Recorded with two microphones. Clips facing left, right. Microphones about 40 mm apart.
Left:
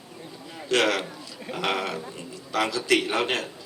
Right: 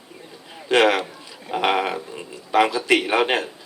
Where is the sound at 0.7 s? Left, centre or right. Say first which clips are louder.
Right 6 dB; right.